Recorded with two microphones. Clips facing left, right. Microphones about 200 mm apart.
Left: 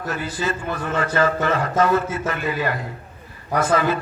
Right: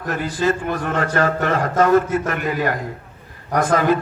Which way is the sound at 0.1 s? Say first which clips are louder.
Right 6 dB; 50° right (ahead or behind).